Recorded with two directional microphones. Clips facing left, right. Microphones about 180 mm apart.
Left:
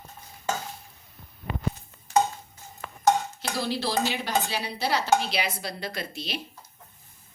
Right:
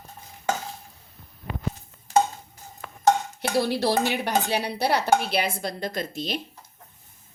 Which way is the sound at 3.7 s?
65° right (ahead or behind).